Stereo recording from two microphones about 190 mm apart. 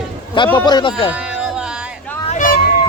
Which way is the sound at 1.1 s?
5° right (ahead or behind).